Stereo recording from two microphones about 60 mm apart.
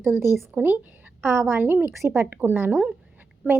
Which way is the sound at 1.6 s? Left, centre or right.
Right.